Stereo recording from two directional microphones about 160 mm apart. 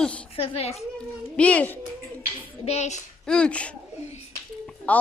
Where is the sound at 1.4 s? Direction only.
10° left (ahead or behind).